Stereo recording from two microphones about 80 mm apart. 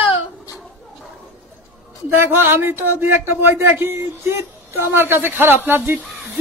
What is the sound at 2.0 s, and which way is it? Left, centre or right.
A man's voice, right.